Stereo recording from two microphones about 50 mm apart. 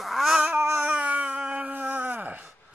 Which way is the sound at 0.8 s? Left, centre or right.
Right.